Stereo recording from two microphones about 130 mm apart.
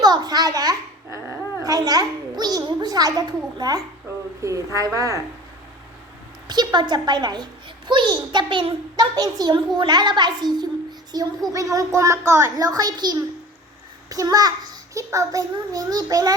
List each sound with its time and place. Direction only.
0.0 s babbling: 30° right (ahead or behind)
4.4 s a child's voice: 25° right (ahead or behind)
6.5 s a child's voice: 30° right (ahead or behind)